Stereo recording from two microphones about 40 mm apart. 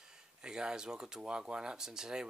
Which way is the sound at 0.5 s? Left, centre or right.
Centre.